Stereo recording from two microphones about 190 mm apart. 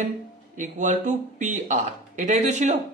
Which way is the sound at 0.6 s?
40° right (ahead or behind).